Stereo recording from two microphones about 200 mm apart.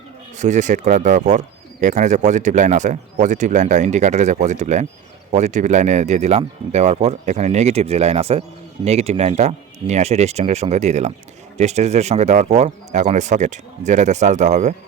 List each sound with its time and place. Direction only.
0.3 s speech: 35° right (ahead or behind)